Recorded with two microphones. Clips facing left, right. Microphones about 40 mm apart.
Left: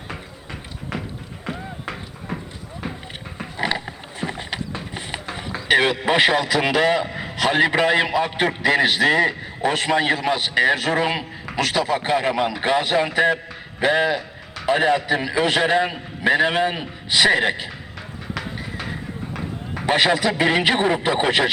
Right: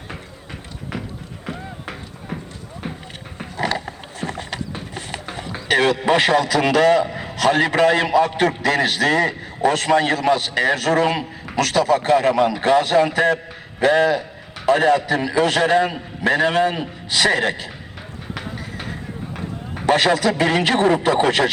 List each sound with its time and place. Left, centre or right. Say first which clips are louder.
1.5 s music: left 1 dB; centre
3.6 s a sound: right 1 dB; left
5.3 s run: even; centre
5.6 s a man's voice: right 1 dB; left
7.1 s a sound: right 1 dB; centre
7.3 s a man's voice: right 1 dB; left
19.8 s a man's voice: right 2 dB; left